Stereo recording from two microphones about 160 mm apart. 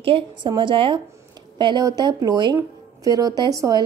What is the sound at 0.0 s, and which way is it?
A woman's voice, 30° right (ahead or behind).